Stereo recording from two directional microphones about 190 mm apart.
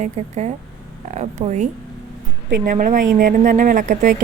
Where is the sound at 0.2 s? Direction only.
35° right (ahead or behind).